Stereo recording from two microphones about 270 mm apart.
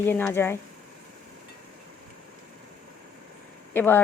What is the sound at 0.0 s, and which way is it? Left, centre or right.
Speech, centre.